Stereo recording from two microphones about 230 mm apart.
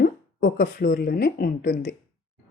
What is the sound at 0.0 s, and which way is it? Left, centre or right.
Speech, left.